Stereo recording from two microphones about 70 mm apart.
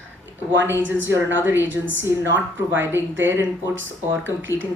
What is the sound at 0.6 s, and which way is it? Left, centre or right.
A woman's voice, right.